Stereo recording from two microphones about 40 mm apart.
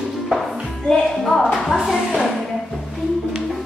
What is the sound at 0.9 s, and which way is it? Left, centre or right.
Music, centre.